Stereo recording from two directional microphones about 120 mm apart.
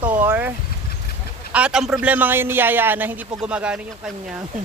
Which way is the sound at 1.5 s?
10° right (ahead or behind).